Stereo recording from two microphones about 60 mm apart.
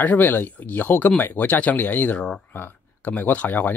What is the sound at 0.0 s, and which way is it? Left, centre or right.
Speech, left.